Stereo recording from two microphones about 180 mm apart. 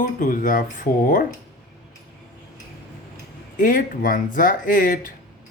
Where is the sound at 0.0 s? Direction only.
50° left (ahead or behind).